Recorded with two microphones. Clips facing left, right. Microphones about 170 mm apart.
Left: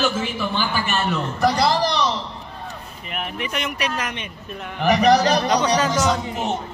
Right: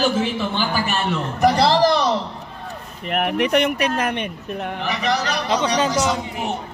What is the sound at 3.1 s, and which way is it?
Speech, 70° right (ahead or behind).